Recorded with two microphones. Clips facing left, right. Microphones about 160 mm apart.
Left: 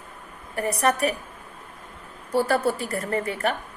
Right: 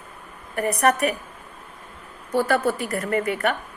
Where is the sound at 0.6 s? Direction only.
30° left (ahead or behind).